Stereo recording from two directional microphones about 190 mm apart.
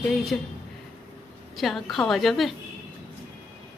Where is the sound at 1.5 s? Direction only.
Centre (ahead or behind).